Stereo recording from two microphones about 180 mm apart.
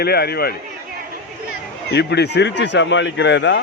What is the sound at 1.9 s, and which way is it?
Speech, 70° left (ahead or behind).